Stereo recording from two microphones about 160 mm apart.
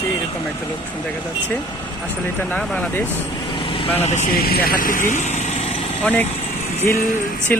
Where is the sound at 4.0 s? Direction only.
45° left (ahead or behind).